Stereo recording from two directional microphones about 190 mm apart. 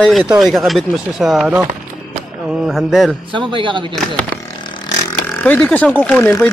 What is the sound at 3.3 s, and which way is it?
Speech, 25° right (ahead or behind).